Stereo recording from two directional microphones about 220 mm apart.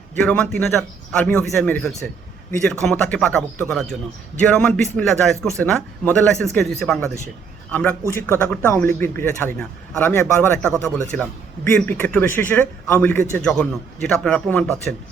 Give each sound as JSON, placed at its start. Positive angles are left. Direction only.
{"t": 0.2, "sound": "a man's voice", "side_deg": 5}